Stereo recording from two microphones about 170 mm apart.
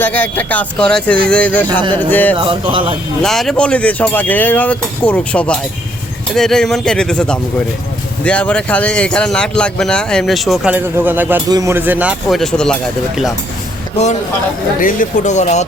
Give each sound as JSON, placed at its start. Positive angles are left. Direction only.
{"t": 0.0, "sound": "speech", "side_deg": 10}
{"t": 1.6, "sound": "speech", "side_deg": -30}
{"t": 2.0, "sound": "speech", "side_deg": 10}
{"t": 2.3, "sound": "speech", "side_deg": -30}
{"t": 3.2, "sound": "speech", "side_deg": 0}
{"t": 12.3, "sound": "speech", "side_deg": 5}
{"t": 14.8, "sound": "speech", "side_deg": 55}